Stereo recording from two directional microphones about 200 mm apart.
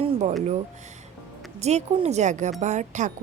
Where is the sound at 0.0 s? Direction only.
35° right (ahead or behind).